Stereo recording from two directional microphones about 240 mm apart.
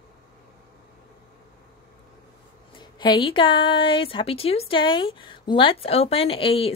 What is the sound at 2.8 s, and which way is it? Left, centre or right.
Speech, centre.